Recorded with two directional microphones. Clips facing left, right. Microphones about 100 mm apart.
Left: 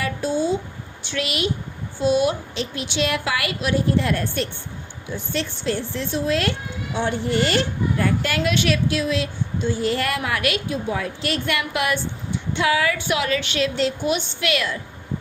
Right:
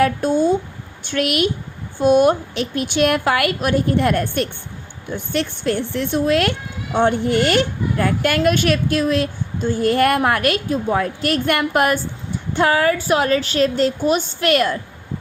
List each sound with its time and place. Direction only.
0.0 s a child's voice: 55° right (ahead or behind)